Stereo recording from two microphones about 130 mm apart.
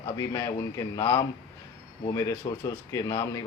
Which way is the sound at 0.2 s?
25° left (ahead or behind).